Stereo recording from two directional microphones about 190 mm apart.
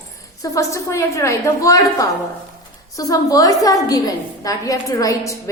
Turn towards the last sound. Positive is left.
turn(degrees=15)  # may be behind; listen again after turning